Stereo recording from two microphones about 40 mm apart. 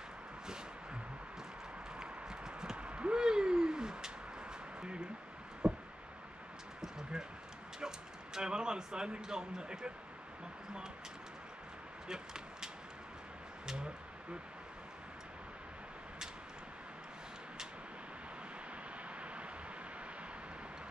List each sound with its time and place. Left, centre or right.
2.0 s clip-clop: centre
2.8 s a sound: right
8.4 s speech: centre
12.1 s speech: centre